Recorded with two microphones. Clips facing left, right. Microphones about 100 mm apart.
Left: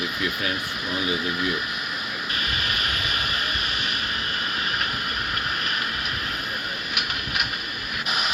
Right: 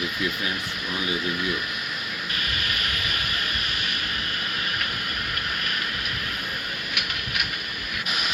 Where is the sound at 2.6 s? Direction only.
30° left (ahead or behind).